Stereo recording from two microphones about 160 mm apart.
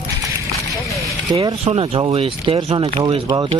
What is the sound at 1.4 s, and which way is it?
Speech, 35° right (ahead or behind).